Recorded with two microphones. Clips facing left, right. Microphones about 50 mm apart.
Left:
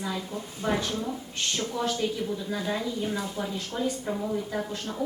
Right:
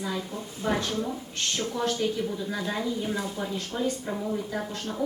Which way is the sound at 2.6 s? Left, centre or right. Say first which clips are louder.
Even; centre.